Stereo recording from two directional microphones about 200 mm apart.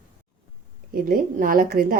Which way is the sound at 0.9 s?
45° right (ahead or behind).